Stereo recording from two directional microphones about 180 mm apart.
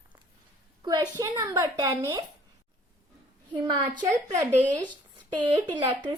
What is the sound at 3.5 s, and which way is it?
Speech, 25° right (ahead or behind).